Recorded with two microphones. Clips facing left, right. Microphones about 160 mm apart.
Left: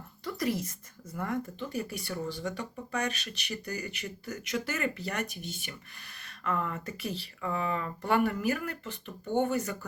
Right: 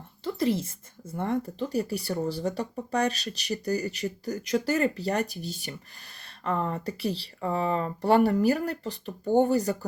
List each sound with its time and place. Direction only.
0.3 s speech: 25° right (ahead or behind)